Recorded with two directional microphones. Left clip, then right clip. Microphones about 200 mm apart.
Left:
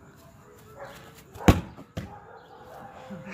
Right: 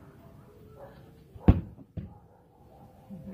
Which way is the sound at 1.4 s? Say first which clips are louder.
Left 6 dB; 70° left (ahead or behind).